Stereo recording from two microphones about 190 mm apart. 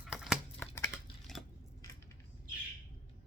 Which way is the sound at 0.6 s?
10° left (ahead or behind).